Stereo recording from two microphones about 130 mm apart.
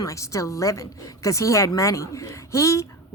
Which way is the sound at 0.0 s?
25° left (ahead or behind).